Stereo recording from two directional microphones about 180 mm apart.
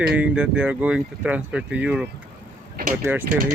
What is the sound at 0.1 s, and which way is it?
Speech, 5° right (ahead or behind).